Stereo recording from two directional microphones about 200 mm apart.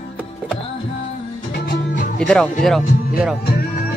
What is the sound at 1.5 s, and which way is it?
Music, 50° left (ahead or behind).